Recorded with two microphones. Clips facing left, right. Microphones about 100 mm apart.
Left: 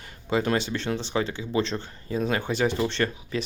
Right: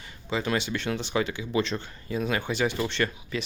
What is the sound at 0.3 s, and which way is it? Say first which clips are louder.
Speech: left 3 dB; 45° left (ahead or behind).